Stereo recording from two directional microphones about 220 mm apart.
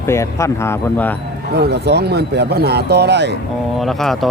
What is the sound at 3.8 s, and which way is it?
Speech, centre (ahead or behind).